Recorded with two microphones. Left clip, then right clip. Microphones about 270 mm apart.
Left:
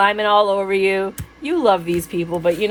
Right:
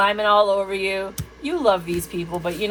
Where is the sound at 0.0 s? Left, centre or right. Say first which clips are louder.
Left 2 dB; left.